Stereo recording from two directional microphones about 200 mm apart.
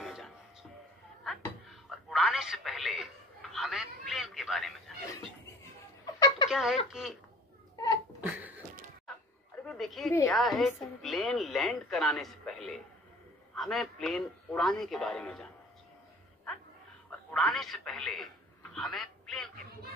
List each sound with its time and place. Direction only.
0.0 s a sound: centre (ahead or behind)
1.7 s a sound: centre (ahead or behind)
6.1 s a sound: 20° left (ahead or behind)
6.5 s speech: 5° right (ahead or behind)
7.7 s sneeze: 20° left (ahead or behind)
8.2 s beatboxing: 10° right (ahead or behind)
9.7 s a woman's voice: centre (ahead or behind)
17.3 s speech: centre (ahead or behind)
18.8 s telephone: centre (ahead or behind)